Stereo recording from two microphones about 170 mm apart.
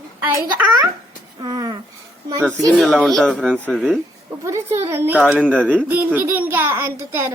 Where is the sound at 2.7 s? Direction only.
Centre (ahead or behind).